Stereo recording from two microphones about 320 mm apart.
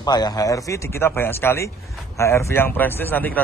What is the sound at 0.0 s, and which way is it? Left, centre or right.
A man's voice, centre.